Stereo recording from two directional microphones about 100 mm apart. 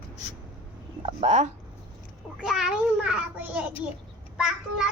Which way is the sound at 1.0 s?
90° right.